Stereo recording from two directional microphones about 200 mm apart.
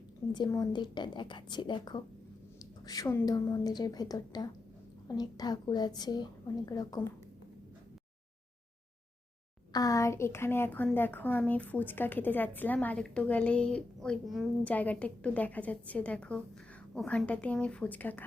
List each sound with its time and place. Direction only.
0.3 s a woman's voice: 20° left (ahead or behind)
9.7 s a woman's voice: 15° left (ahead or behind)